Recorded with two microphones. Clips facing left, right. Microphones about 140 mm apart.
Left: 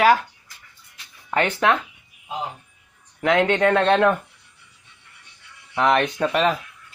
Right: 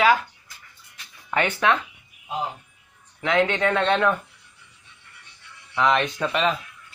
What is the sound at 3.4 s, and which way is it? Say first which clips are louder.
Speech: left 4 dB; 45° left (ahead or behind).